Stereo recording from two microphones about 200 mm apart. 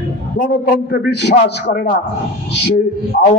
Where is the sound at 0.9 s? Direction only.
50° left (ahead or behind).